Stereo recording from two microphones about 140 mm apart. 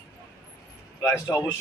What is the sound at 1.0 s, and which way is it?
Speech, 20° left (ahead or behind).